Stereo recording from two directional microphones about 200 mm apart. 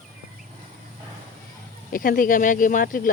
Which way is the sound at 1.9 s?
45° left (ahead or behind).